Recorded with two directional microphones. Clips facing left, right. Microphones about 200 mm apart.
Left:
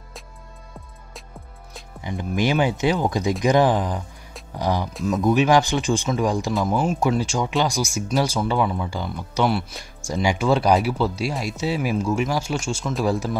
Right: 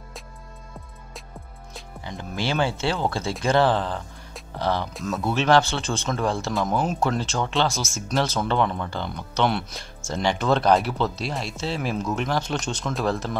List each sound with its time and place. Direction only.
2.0 s speech: 15° left (ahead or behind)